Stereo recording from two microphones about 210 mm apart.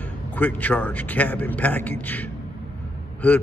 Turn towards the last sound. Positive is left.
turn(degrees=5)  # may be behind; listen again after turning